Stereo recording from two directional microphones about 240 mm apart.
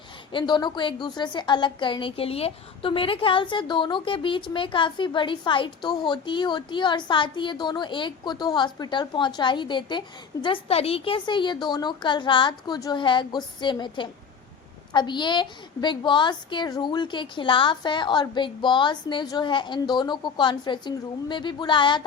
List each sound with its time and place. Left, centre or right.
0.3 s a woman's voice: centre